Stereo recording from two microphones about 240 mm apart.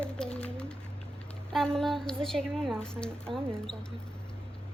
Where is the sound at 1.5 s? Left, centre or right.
Centre.